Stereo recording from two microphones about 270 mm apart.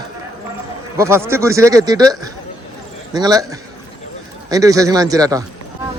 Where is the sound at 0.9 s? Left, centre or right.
Centre.